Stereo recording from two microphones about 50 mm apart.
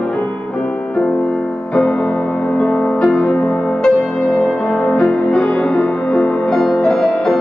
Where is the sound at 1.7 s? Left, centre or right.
Centre.